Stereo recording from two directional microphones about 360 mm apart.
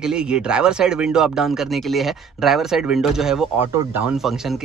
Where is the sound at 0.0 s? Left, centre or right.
Centre.